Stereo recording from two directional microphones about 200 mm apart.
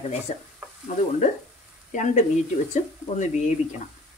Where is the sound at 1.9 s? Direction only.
40° left (ahead or behind).